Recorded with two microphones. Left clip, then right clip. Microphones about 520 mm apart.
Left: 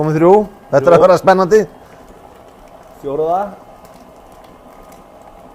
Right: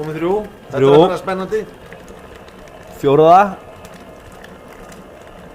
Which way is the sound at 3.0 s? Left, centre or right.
Right.